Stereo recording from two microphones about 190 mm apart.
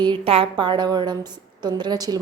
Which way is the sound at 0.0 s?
25° right (ahead or behind).